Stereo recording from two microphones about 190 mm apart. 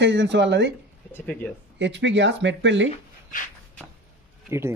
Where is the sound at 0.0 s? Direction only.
70° right (ahead or behind).